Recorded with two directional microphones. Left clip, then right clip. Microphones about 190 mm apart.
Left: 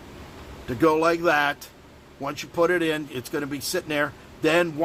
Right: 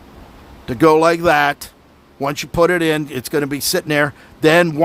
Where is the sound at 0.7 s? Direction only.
50° right (ahead or behind).